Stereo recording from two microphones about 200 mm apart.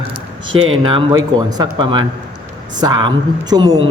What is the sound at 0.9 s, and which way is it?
A man's voice, 25° right (ahead or behind).